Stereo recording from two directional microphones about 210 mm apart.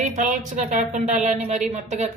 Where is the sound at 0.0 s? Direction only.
35° right (ahead or behind).